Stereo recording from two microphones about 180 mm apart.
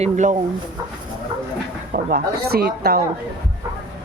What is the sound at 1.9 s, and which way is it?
Speech, 55° right (ahead or behind).